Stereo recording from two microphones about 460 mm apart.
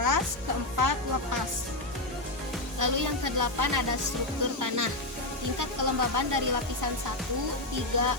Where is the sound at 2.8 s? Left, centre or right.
Right.